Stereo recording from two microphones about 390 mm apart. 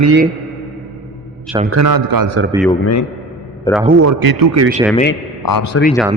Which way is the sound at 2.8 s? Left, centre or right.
Left.